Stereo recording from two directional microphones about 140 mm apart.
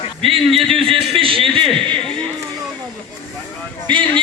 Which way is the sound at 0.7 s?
Centre (ahead or behind).